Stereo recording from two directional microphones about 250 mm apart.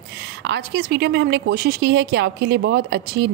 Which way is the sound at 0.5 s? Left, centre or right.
Right.